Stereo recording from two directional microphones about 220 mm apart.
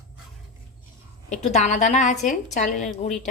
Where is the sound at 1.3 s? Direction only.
30° left (ahead or behind).